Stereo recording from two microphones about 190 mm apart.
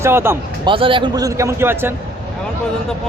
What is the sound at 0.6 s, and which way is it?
A man's voice, 25° right (ahead or behind).